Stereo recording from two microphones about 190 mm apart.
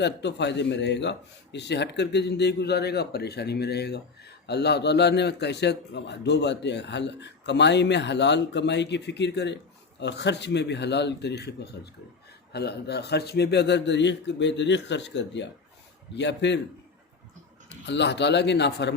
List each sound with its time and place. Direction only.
0.0 s speech: 65° left (ahead or behind)
17.7 s speech: 65° left (ahead or behind)